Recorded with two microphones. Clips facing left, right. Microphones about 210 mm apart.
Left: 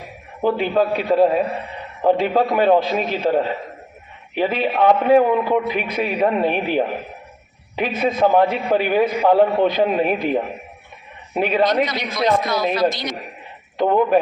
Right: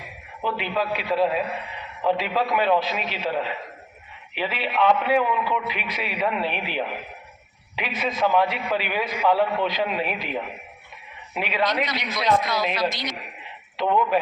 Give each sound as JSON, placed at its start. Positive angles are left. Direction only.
{"t": 0.4, "sound": "a man's voice", "side_deg": 45}